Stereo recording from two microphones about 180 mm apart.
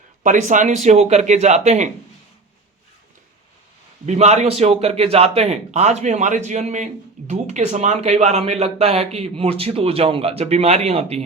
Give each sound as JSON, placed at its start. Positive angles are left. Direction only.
{"t": 0.2, "sound": "a man's voice", "side_deg": -45}
{"t": 4.0, "sound": "a man's voice", "side_deg": -40}